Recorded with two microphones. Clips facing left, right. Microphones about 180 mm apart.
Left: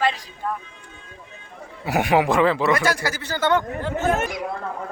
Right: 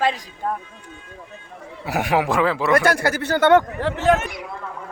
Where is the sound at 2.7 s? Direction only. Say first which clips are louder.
Right 4 dB; 60° right (ahead or behind); by 4.2 s 80° right.